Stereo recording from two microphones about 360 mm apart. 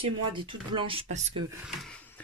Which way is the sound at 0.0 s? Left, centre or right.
Centre.